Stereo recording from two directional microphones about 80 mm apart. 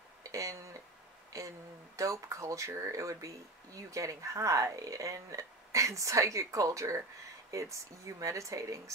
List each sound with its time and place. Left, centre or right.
0.3 s speech: right
1.3 s a sound: right
2.0 s speech: right